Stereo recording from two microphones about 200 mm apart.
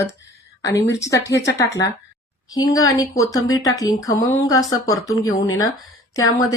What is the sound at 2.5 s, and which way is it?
Speech, 15° left (ahead or behind).